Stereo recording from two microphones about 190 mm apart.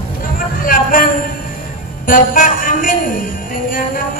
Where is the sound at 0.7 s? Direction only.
45° left (ahead or behind).